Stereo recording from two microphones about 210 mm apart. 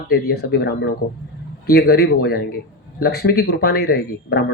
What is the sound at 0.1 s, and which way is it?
Speech, 50° left (ahead or behind).